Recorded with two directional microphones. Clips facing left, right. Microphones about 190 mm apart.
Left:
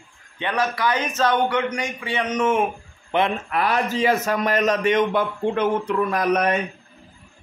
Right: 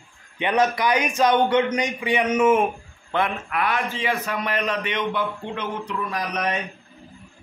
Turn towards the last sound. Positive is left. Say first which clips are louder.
# left 6 dB
turn(degrees=50)  # may be behind; listen again after turning